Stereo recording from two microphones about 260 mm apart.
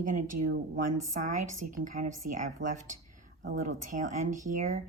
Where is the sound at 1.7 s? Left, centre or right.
Right.